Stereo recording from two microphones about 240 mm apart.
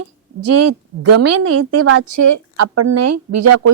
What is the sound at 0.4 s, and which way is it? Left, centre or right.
A woman's voice, right.